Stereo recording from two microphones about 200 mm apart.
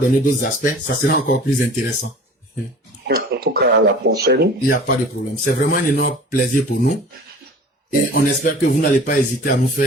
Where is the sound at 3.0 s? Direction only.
50° right (ahead or behind).